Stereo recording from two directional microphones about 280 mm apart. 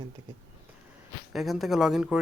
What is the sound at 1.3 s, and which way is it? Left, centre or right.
Speech, centre.